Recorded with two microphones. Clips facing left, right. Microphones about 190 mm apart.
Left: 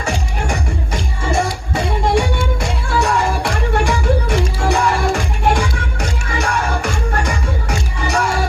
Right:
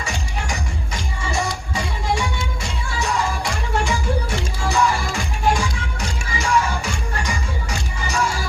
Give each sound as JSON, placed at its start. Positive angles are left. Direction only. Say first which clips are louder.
{"t": 0.0, "sound": "music", "louder": "left 6 dB", "side_deg": 60}